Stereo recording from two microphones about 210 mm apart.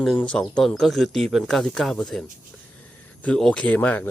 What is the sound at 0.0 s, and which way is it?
Speech, 5° left (ahead or behind).